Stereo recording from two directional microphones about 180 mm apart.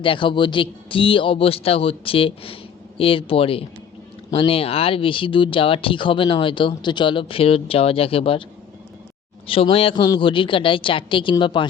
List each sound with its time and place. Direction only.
0.0 s speech: 30° left (ahead or behind)
9.5 s speech: 30° left (ahead or behind)